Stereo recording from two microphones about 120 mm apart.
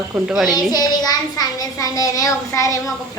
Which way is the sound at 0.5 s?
35° left (ahead or behind).